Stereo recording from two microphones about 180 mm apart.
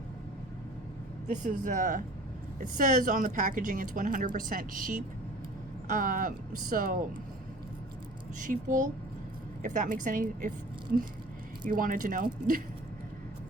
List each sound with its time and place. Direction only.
1.3 s a woman's voice: 45° right (ahead or behind)
8.4 s a woman's voice: 45° right (ahead or behind)
11.6 s a woman's voice: 50° right (ahead or behind)